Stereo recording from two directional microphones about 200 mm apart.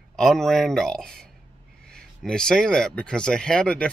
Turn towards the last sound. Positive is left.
turn(degrees=5)  # may be behind; listen again after turning